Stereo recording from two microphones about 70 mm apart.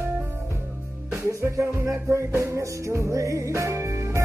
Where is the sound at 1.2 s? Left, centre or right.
Right.